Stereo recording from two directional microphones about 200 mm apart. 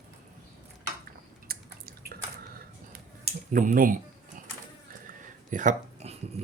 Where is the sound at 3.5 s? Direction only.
40° right (ahead or behind).